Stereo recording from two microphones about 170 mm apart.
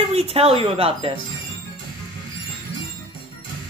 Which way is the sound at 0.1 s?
35° right (ahead or behind).